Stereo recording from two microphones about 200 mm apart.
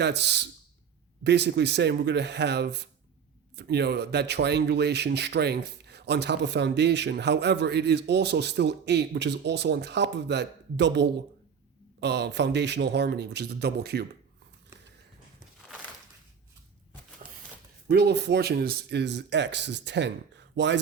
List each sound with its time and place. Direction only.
0.0 s speech: 60° right (ahead or behind)
17.8 s speech: 55° right (ahead or behind)